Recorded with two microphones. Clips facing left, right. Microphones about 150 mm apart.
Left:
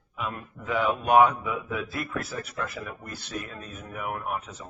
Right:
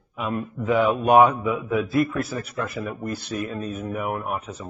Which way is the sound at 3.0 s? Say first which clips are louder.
Right 8 dB; 10° right (ahead or behind).